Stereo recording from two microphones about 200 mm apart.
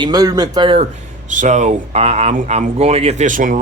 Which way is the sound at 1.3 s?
35° right (ahead or behind).